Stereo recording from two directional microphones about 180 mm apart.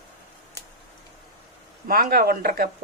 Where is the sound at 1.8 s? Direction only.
55° right (ahead or behind).